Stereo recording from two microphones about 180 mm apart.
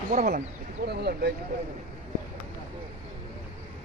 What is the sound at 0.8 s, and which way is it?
Speech, 65° right (ahead or behind).